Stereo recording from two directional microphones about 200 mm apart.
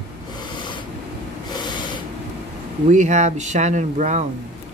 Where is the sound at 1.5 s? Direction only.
20° left (ahead or behind).